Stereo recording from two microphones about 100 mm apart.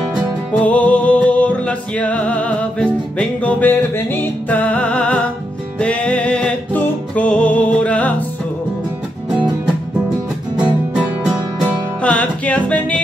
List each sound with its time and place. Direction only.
0.6 s music: 15° left (ahead or behind)
10.6 s music: 10° right (ahead or behind)
12.0 s music: 10° left (ahead or behind)